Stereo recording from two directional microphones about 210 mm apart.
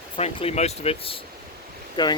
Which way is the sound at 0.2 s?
30° left (ahead or behind).